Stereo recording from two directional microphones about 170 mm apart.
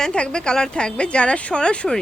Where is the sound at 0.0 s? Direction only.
5° left (ahead or behind).